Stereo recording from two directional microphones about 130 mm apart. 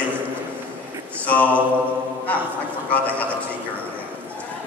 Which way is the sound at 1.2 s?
10° left (ahead or behind).